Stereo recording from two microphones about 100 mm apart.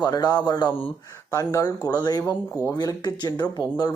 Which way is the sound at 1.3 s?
30° left (ahead or behind).